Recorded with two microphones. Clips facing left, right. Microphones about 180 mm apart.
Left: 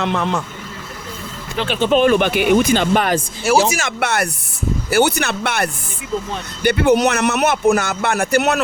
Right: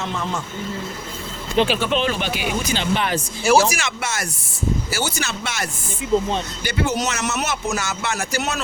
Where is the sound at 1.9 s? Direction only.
55° left (ahead or behind).